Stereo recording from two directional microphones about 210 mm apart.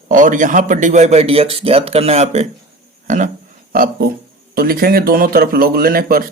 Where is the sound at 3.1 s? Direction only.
35° right (ahead or behind).